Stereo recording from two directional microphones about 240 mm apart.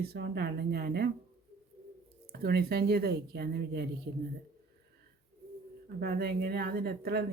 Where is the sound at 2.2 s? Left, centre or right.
Right.